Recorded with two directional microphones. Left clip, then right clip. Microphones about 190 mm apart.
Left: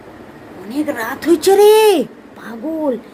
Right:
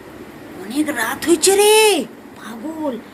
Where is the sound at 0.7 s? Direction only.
20° left (ahead or behind); by 2.5 s 45° left (ahead or behind).